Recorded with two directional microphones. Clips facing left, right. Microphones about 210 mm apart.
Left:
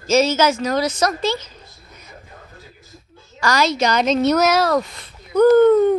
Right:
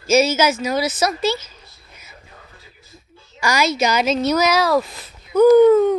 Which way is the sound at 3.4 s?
10° right (ahead or behind).